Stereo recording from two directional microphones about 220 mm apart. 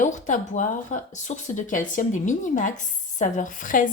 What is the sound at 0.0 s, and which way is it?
Speech, 35° left (ahead or behind).